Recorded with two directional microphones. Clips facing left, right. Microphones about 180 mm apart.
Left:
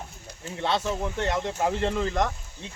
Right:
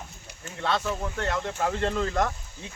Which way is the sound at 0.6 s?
20° left (ahead or behind).